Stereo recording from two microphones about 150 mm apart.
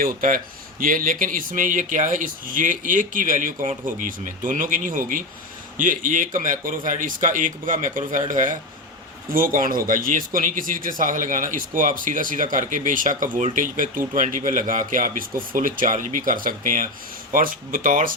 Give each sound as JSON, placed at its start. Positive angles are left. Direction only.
{"t": 0.0, "sound": "speech", "side_deg": -65}